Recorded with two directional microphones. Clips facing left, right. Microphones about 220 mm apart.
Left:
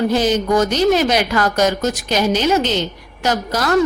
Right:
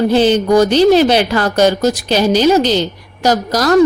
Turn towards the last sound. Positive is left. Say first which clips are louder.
# right 5 dB
turn(degrees=-40)  # may be behind; listen again after turning